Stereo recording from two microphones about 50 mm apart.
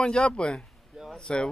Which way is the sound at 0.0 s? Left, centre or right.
Centre.